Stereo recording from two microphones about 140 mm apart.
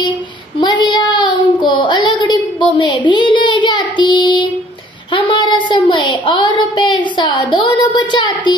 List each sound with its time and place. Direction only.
0.6 s child singing: 35° left (ahead or behind)
5.1 s a sound: 35° left (ahead or behind)
7.9 s speech: 35° left (ahead or behind)